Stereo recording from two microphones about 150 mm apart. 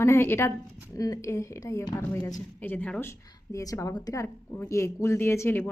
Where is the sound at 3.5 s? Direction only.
20° left (ahead or behind).